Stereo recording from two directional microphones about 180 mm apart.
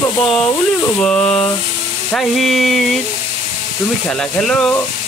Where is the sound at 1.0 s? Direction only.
5° left (ahead or behind).